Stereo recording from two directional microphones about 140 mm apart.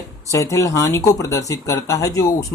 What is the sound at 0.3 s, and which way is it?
Speech, 20° left (ahead or behind).